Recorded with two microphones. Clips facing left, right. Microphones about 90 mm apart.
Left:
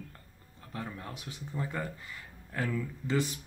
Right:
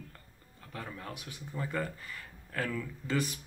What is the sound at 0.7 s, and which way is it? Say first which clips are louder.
Speech: left 2 dB; 25° left (ahead or behind).